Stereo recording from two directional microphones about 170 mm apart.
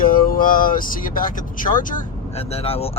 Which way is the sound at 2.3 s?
35° left (ahead or behind).